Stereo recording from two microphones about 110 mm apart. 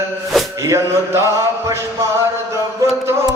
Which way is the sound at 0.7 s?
25° right (ahead or behind).